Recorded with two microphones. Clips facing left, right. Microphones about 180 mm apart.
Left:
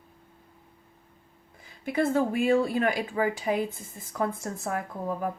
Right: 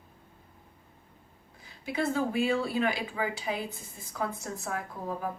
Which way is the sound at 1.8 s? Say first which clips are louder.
Left 4 dB; 50° left (ahead or behind).